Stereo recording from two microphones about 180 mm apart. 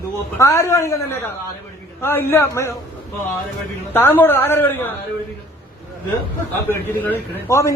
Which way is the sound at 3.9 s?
10° left (ahead or behind).